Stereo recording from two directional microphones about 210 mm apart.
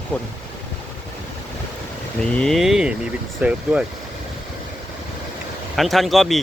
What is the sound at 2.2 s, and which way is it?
Speech, 5° left (ahead or behind).